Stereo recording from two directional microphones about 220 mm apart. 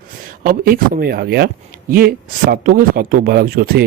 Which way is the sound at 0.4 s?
40° right (ahead or behind).